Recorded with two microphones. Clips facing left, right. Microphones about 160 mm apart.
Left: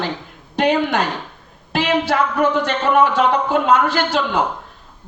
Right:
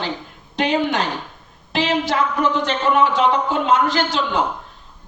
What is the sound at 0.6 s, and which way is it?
A woman's voice, 50° left (ahead or behind).